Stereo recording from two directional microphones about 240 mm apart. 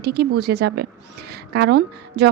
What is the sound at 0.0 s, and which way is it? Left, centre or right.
A woman's voice, right.